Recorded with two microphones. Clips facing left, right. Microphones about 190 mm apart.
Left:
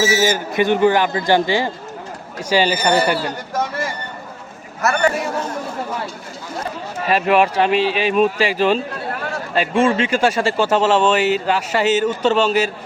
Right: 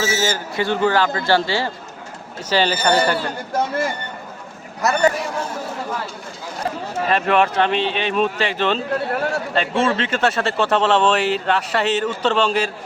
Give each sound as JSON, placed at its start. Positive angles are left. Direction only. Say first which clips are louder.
{"t": 0.0, "sound": "speech", "louder": "left 4 dB", "side_deg": 15}
{"t": 4.8, "sound": "a man's voice", "louder": "even", "side_deg": -15}
{"t": 7.1, "sound": "speech", "louder": "left 3 dB", "side_deg": 10}